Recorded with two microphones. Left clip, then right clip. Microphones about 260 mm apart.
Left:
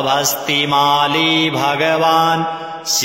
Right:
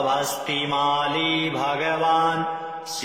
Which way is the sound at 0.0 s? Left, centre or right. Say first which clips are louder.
Left 7 dB; left.